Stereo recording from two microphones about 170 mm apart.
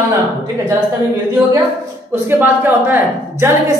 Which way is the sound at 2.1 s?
10° right (ahead or behind).